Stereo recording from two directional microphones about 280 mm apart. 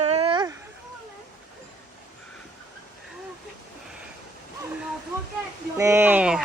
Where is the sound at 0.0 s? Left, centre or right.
Right.